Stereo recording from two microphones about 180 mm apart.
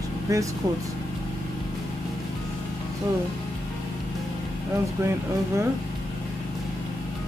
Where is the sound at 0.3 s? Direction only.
20° right (ahead or behind).